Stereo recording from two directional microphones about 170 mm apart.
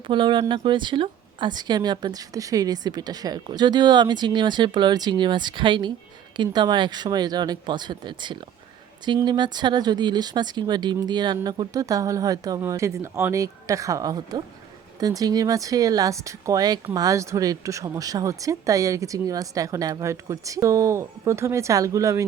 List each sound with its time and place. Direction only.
0.1 s speech: 30° right (ahead or behind)